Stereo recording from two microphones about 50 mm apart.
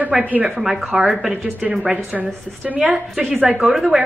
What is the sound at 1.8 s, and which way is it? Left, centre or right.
A woman's voice, right.